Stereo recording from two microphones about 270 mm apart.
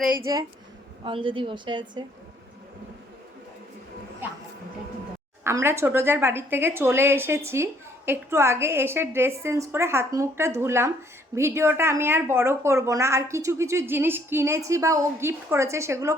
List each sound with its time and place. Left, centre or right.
0.0 s speech: centre
5.4 s speech: centre